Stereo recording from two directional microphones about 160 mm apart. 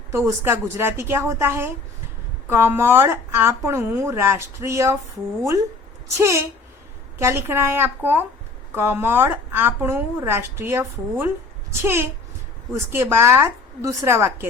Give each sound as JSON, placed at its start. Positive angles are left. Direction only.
{"t": 0.1, "sound": "a woman's voice", "side_deg": -15}
{"t": 6.1, "sound": "a woman's voice", "side_deg": -15}